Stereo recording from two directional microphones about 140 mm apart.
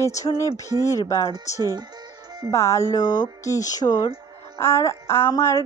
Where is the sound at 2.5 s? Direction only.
20° left (ahead or behind).